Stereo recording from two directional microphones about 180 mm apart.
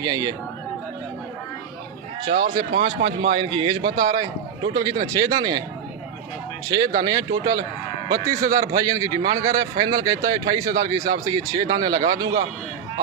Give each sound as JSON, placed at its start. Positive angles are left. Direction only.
{"t": 0.0, "sound": "a man's voice", "side_deg": -20}
{"t": 2.4, "sound": "speech", "side_deg": -60}
{"t": 2.8, "sound": "a man's voice", "side_deg": -35}
{"t": 6.7, "sound": "a man's voice", "side_deg": -20}